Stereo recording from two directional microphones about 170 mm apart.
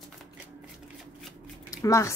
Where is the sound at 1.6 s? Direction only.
20° left (ahead or behind).